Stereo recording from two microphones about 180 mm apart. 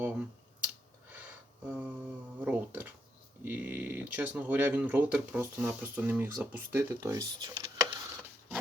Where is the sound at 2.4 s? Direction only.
10° right (ahead or behind).